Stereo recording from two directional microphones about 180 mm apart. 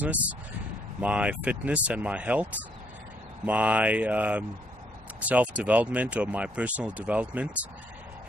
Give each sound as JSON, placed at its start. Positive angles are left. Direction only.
{"t": 0.0, "sound": "speech", "side_deg": -10}